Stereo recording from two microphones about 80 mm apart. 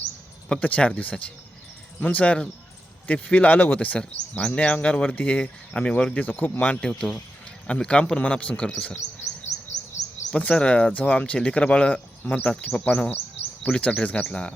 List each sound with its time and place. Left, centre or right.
0.6 s speech: centre
7.7 s speech: centre
10.3 s speech: centre